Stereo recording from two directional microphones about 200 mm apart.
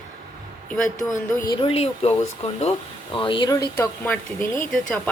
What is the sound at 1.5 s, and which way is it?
Speech, 25° left (ahead or behind).